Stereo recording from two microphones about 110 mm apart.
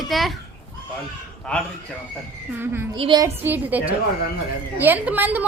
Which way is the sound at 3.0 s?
50° right (ahead or behind).